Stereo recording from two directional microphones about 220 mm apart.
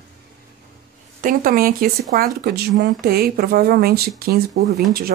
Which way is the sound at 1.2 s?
40° right (ahead or behind).